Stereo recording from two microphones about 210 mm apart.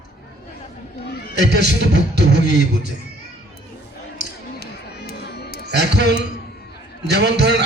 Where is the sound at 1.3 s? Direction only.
55° right (ahead or behind).